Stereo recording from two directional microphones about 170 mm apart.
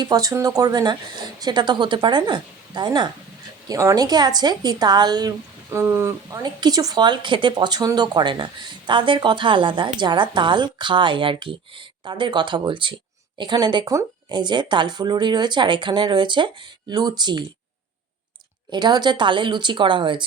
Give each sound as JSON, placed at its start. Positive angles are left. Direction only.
{"t": 0.0, "sound": "speech", "side_deg": -20}
{"t": 18.7, "sound": "speech", "side_deg": -25}